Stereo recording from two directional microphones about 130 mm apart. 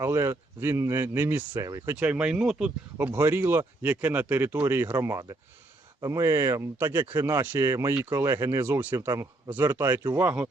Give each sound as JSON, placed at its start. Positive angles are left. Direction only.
{"t": 0.0, "sound": "speech", "side_deg": -20}
{"t": 2.0, "sound": "speech", "side_deg": -10}
{"t": 3.0, "sound": "speech", "side_deg": -15}